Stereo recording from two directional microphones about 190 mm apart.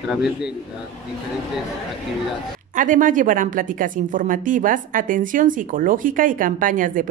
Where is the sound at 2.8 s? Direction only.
45° right (ahead or behind).